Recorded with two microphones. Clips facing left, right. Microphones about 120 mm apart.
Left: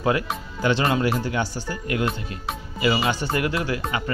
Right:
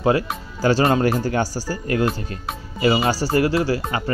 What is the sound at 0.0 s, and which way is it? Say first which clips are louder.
Speech: right 4 dB; 30° right (ahead or behind).